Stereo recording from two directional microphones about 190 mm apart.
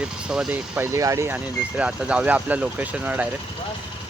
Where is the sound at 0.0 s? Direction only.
5° right (ahead or behind).